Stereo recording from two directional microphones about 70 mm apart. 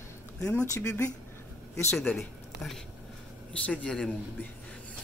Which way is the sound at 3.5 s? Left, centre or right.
Centre.